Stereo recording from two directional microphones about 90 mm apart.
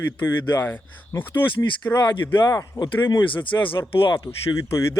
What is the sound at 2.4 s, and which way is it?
Speech, 35° left (ahead or behind).